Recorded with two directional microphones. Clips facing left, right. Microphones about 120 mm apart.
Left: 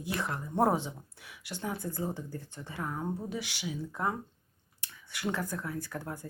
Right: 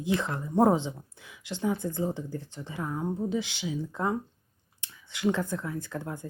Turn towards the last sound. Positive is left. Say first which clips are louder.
# right 3 dB
turn(degrees=-20)  # may be behind; listen again after turning